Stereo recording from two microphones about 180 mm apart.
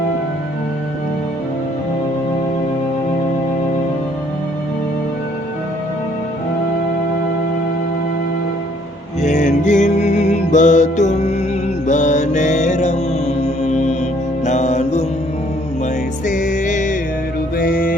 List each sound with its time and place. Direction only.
9.2 s music: 45° left (ahead or behind)
16.2 s music: 45° left (ahead or behind)